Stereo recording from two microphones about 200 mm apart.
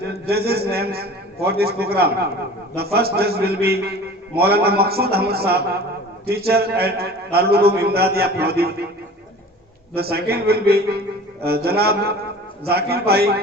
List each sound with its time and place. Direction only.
0.1 s a man's voice: 50° right (ahead or behind)
9.9 s a man's voice: 50° right (ahead or behind)